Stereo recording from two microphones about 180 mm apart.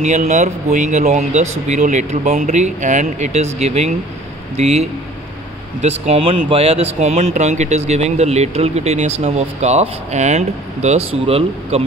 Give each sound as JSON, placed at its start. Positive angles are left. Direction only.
{"t": 0.3, "sound": "speech", "side_deg": -40}